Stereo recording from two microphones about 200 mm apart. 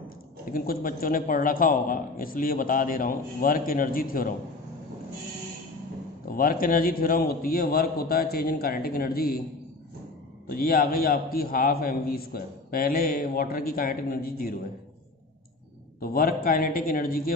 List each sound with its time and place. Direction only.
0.5 s a man's voice: 45° left (ahead or behind)
6.2 s a man's voice: 45° left (ahead or behind)
10.5 s a man's voice: 45° left (ahead or behind)
16.0 s a man's voice: 45° left (ahead or behind)